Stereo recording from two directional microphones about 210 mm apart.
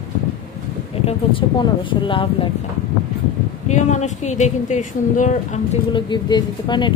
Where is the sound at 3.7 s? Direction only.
35° left (ahead or behind).